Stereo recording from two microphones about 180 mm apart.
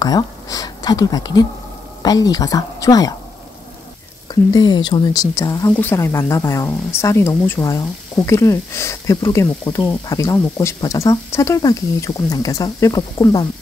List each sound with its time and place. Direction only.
0.0 s a woman's voice: 20° left (ahead or behind)
4.3 s speech: 25° left (ahead or behind)